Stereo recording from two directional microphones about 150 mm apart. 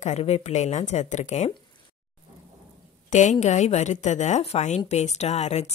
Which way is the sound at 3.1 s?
50° left (ahead or behind).